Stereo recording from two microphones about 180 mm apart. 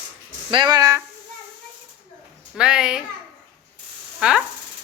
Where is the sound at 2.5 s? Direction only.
5° right (ahead or behind).